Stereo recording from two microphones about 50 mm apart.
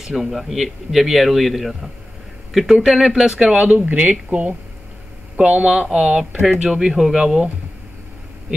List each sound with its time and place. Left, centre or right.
0.0 s speech: centre
3.6 s speech: right; by 7.4 s centre